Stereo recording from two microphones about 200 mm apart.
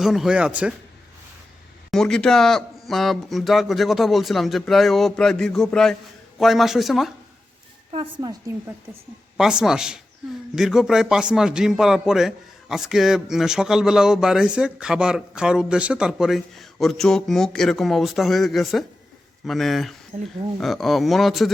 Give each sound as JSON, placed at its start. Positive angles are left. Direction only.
{"t": 0.0, "sound": "a man's voice", "side_deg": 0}
{"t": 1.9, "sound": "a man's voice", "side_deg": 0}
{"t": 7.9, "sound": "a woman's voice", "side_deg": -20}
{"t": 9.4, "sound": "a man's voice", "side_deg": -5}